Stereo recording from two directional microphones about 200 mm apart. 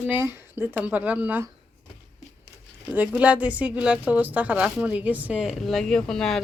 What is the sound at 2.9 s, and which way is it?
Speech, 5° right (ahead or behind).